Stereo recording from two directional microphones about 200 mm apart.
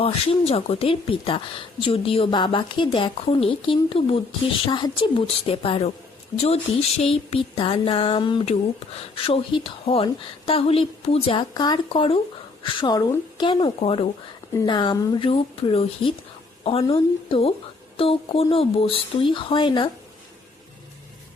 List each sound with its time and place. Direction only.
0.0 s speech: 30° left (ahead or behind)